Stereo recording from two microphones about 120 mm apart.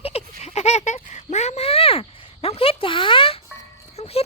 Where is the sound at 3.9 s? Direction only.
60° left (ahead or behind).